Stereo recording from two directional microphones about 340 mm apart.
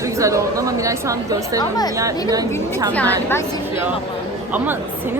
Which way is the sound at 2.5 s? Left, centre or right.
Centre.